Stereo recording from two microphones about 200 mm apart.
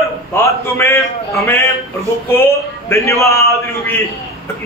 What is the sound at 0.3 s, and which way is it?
A man's voice, 10° left (ahead or behind).